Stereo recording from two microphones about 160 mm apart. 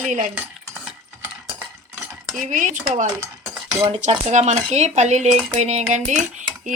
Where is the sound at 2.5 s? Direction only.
50° right (ahead or behind).